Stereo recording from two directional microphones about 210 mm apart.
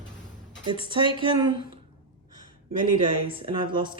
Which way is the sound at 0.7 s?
20° right (ahead or behind).